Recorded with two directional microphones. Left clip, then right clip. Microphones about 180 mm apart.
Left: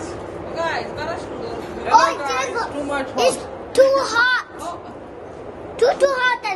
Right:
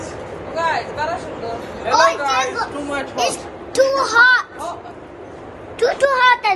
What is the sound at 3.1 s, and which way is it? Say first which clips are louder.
Speech: left 3 dB; 55° left (ahead or behind).